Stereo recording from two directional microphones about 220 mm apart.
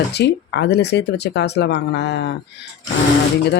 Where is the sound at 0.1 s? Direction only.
50° left (ahead or behind).